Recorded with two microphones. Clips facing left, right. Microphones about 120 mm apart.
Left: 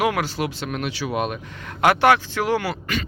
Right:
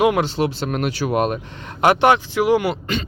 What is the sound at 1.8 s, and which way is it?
Speech, 25° right (ahead or behind).